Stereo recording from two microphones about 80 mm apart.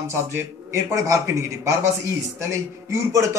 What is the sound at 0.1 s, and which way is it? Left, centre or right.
Speech, right.